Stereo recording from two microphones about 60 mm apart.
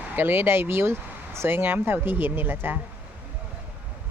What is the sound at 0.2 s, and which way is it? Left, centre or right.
Speech, right.